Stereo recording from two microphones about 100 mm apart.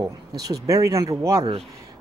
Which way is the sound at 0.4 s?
35° right (ahead or behind).